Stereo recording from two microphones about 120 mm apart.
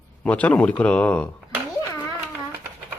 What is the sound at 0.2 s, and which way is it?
Speech, 10° left (ahead or behind).